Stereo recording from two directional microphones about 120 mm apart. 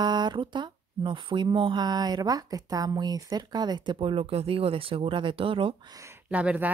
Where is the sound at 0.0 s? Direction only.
35° right (ahead or behind).